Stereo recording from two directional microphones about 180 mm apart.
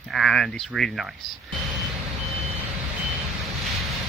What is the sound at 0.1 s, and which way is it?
Speech, centre (ahead or behind).